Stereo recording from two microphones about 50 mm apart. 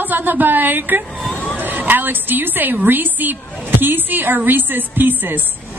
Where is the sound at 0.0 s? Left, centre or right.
Right.